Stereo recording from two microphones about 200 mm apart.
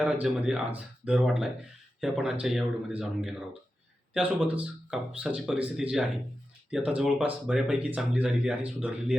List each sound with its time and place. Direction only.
0.0 s speech: 5° right (ahead or behind)